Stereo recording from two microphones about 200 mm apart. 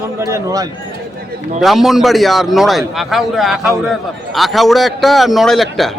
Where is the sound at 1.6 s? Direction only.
Centre (ahead or behind).